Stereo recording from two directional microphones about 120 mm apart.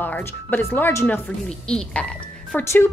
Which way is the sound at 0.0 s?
15° left (ahead or behind).